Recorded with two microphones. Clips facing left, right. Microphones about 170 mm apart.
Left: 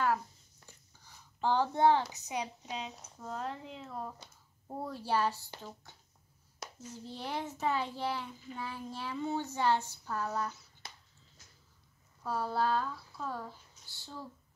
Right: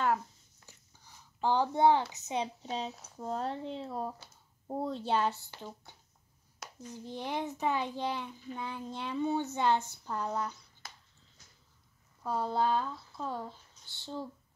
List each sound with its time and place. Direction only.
1.4 s a child's voice: 15° right (ahead or behind)
6.8 s a child's voice: 15° right (ahead or behind)
12.2 s speech: 20° right (ahead or behind)